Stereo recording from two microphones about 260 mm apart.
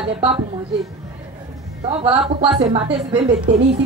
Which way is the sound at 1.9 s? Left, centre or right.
Right.